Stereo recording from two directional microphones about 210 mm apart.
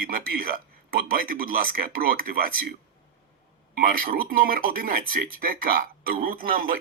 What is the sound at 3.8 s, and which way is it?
Speech, 45° right (ahead or behind).